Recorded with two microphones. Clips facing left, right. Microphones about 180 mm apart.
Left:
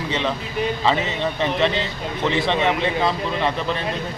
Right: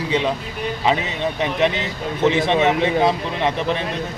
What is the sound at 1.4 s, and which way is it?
Speech, 15° right (ahead or behind).